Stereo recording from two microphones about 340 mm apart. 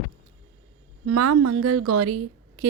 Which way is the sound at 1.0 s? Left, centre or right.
Right.